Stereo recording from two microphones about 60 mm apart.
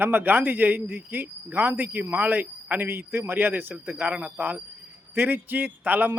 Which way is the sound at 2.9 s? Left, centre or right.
Right.